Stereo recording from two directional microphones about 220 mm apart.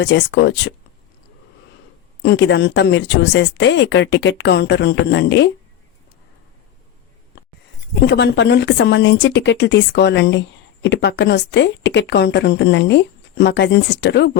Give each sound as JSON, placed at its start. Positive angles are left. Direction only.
{"t": 0.0, "sound": "speech", "side_deg": 55}
{"t": 2.2, "sound": "speech", "side_deg": 55}
{"t": 8.0, "sound": "speech", "side_deg": 50}